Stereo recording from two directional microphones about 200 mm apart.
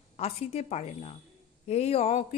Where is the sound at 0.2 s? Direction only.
30° left (ahead or behind).